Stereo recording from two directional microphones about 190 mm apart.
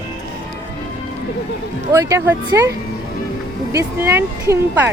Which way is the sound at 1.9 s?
15° right (ahead or behind).